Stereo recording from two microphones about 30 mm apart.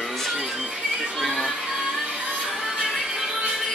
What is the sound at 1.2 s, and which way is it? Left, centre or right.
Music, centre.